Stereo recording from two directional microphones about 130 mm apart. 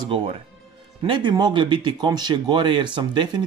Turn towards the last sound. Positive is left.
turn(degrees=-35)  # may be behind; listen again after turning